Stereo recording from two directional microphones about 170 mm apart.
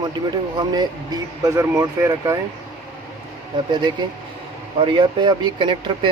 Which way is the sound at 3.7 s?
25° right (ahead or behind).